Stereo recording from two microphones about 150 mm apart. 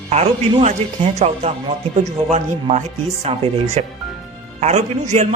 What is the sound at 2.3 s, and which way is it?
Speech, 50° right (ahead or behind).